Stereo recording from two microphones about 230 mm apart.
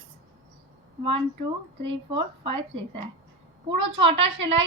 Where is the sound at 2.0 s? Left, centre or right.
Right.